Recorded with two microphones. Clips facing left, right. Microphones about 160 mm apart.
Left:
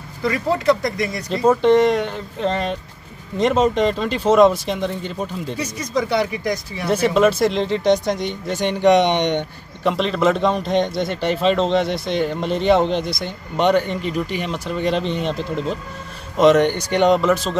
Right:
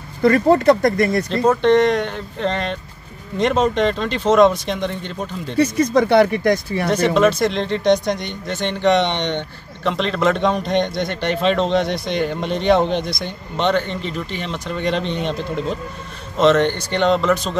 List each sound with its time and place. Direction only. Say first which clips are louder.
0.2 s speech: right 7 dB; 50° right (ahead or behind)
1.3 s a man's voice: left 2 dB; 5° left (ahead or behind)
5.6 s speech: right 9 dB; 60° right (ahead or behind)
6.9 s speech: even; 5° left (ahead or behind)
9.8 s a man's voice: left 1 dB; 5° left (ahead or behind)
16.3 s speech: left 1 dB; 10° left (ahead or behind)